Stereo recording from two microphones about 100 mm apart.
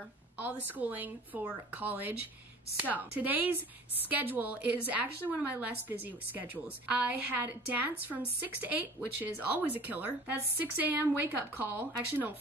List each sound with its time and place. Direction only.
0.7 s a woman's voice: 15° right (ahead or behind)